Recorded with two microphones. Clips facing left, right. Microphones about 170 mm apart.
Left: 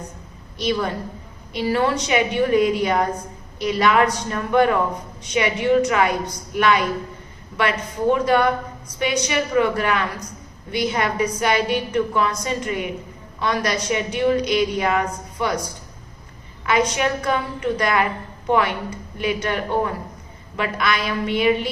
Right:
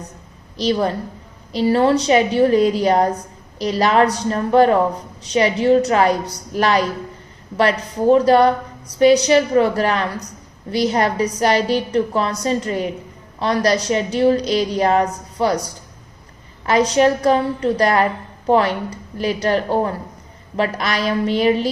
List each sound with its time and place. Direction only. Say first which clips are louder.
0.5 s a woman's voice: right 4 dB; 35° right (ahead or behind)
16.6 s a woman's voice: right 6 dB; 35° right (ahead or behind)